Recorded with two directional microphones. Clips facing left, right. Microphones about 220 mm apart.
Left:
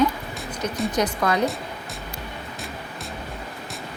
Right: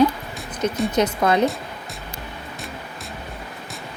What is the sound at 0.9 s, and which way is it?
Speech, 25° right (ahead or behind).